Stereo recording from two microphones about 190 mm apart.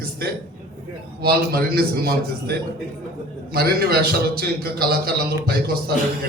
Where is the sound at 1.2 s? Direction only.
55° right (ahead or behind).